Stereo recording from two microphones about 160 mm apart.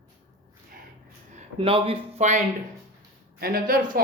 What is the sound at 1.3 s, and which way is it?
Speech, 35° right (ahead or behind).